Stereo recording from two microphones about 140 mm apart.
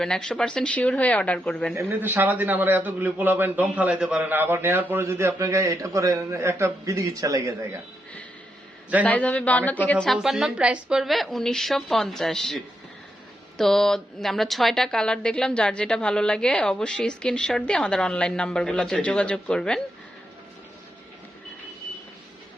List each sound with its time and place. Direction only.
0.0 s speech: 5° left (ahead or behind)
1.7 s a man's voice: 15° right (ahead or behind)
9.0 s speech: 10° left (ahead or behind)
10.1 s a woman's voice: 5° right (ahead or behind)